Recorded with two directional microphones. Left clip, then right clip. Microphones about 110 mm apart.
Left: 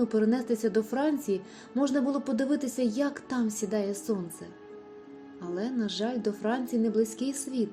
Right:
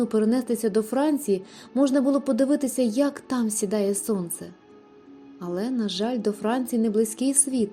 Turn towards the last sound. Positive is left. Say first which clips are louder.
# right 7 dB
turn(degrees=-90)